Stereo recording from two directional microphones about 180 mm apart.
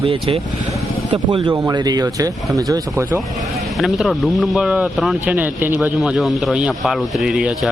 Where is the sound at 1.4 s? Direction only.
20° right (ahead or behind).